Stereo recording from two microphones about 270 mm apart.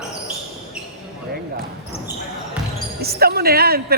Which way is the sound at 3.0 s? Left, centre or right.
Right.